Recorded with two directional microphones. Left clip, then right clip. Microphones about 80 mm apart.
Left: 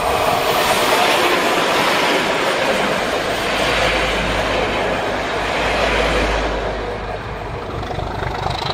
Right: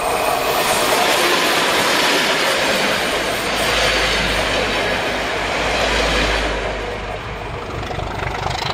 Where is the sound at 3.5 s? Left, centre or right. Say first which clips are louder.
Even; right.